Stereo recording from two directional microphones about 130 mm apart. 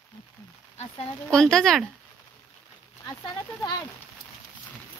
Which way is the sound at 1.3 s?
5° left (ahead or behind).